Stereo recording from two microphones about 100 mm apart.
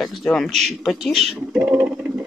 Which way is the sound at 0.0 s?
5° left (ahead or behind).